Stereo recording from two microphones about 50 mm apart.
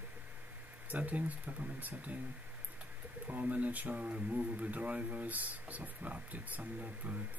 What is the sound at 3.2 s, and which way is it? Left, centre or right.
Speech, right.